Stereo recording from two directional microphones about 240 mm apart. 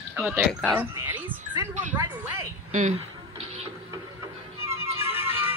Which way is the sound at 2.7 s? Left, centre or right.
Right.